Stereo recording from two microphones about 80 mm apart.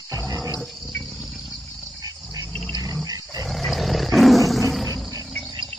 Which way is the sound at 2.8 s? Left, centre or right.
Right.